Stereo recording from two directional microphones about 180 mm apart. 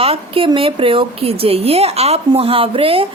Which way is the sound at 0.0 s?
30° right (ahead or behind).